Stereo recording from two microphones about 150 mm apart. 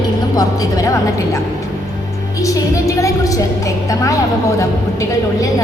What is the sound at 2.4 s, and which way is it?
A woman's voice, 20° left (ahead or behind).